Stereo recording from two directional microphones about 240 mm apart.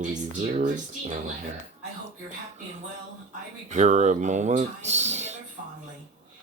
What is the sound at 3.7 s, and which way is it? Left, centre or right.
Speech, right.